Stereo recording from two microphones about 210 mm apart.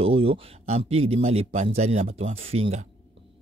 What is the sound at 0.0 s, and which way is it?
Speech, 25° right (ahead or behind).